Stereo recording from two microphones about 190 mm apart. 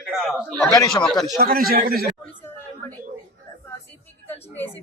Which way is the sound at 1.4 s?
50° right (ahead or behind).